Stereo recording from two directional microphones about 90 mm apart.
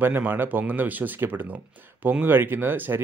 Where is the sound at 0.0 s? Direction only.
25° right (ahead or behind).